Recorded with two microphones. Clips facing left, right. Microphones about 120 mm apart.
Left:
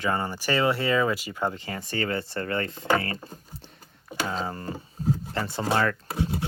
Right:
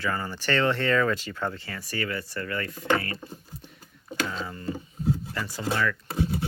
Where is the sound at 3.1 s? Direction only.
40° left (ahead or behind).